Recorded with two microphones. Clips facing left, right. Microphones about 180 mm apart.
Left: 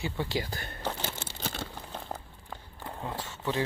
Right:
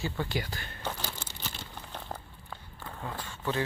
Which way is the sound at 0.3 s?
35° left (ahead or behind).